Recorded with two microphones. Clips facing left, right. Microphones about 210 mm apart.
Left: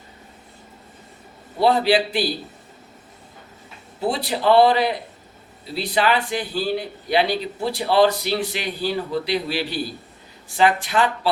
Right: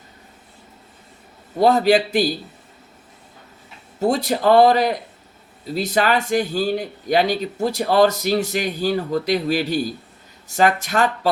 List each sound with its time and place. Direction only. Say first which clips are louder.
1.5 s speech: right 2 dB; 45° right (ahead or behind)
4.0 s speech: right 3 dB; 45° right (ahead or behind)